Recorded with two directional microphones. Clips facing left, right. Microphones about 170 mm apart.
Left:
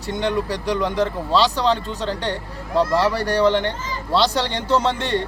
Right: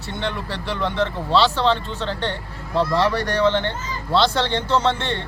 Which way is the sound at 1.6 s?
40° left (ahead or behind).